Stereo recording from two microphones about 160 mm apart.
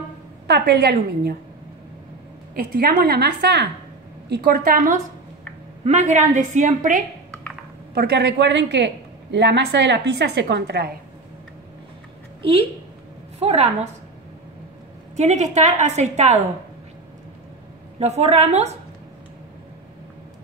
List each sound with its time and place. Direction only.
0.5 s a woman's voice: 90° right
2.5 s a woman's voice: 70° right (ahead or behind); by 3.6 s 90° right
4.3 s a woman's voice: 75° right (ahead or behind)
5.9 s a woman's voice: 50° right (ahead or behind)
7.9 s a woman's voice: 85° right
12.4 s a woman's voice: 35° right (ahead or behind)
15.1 s a woman's voice: 45° right (ahead or behind)
17.9 s a woman's voice: 40° right (ahead or behind)